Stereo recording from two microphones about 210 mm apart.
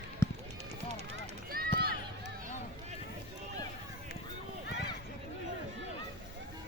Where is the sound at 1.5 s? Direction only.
45° right (ahead or behind).